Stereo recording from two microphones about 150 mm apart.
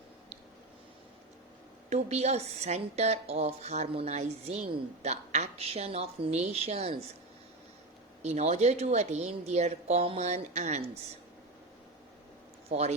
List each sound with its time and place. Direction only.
1.9 s speech: 45° right (ahead or behind)
8.2 s speech: 45° right (ahead or behind)
12.7 s speech: 45° right (ahead or behind)